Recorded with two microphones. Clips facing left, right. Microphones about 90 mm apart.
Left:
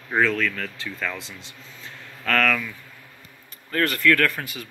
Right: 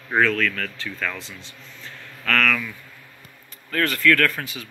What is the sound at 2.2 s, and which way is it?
Speech, 20° left (ahead or behind).